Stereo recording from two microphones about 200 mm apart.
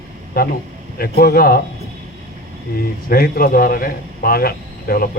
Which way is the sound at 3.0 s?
45° left (ahead or behind).